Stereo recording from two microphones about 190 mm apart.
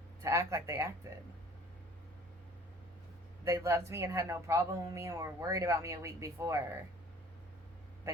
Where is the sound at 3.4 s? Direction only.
15° right (ahead or behind).